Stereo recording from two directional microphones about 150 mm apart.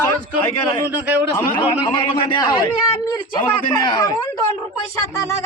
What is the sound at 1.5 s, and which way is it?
A man's voice, 30° left (ahead or behind).